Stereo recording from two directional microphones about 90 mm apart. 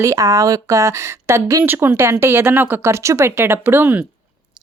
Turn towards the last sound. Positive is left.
turn(degrees=-20)  # may be behind; listen again after turning